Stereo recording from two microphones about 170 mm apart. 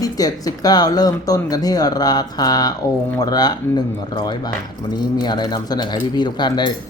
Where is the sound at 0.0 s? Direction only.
20° left (ahead or behind).